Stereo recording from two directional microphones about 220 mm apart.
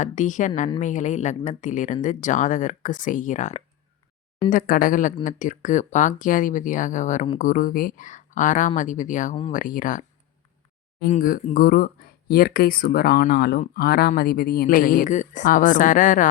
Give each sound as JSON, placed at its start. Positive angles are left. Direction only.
{"t": 0.0, "sound": "speech", "side_deg": 35}
{"t": 11.1, "sound": "speech", "side_deg": 40}